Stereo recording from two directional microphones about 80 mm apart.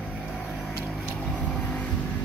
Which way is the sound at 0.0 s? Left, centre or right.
Centre.